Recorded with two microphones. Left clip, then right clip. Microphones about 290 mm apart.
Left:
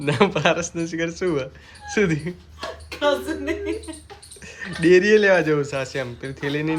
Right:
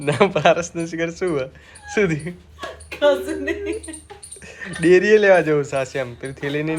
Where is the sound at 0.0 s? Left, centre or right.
Centre.